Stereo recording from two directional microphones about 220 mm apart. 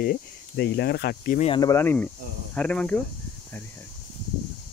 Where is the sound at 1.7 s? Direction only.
10° left (ahead or behind).